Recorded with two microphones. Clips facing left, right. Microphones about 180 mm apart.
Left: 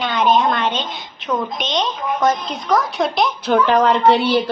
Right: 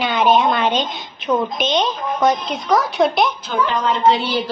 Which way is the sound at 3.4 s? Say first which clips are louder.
Left 5 dB; 65° left (ahead or behind).